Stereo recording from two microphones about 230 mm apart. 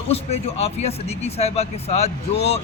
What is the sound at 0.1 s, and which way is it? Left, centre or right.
A man's voice, left.